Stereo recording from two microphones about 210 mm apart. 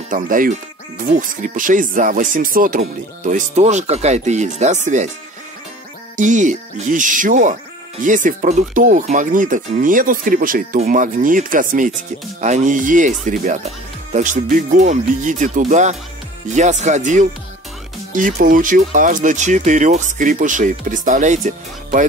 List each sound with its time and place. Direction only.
0.1 s speech: 40° right (ahead or behind)
6.1 s speech: 35° right (ahead or behind)